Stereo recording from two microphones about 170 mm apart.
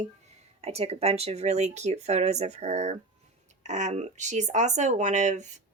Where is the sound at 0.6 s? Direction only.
35° right (ahead or behind).